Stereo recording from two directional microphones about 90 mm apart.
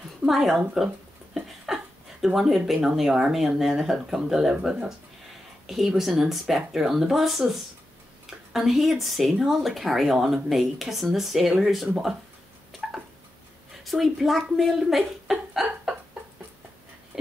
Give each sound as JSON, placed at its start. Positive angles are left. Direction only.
{"t": 0.2, "sound": "speech", "side_deg": -5}
{"t": 1.3, "sound": "a sound", "side_deg": -5}
{"t": 2.2, "sound": "speech", "side_deg": -5}
{"t": 13.8, "sound": "a woman's voice", "side_deg": 0}
{"t": 17.1, "sound": "dog", "side_deg": -10}